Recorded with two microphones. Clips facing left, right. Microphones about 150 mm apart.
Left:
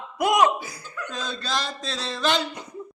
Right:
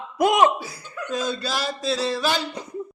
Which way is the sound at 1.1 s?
10° right (ahead or behind).